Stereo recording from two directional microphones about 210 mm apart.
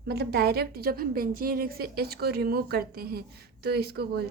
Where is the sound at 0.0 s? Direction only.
50° right (ahead or behind).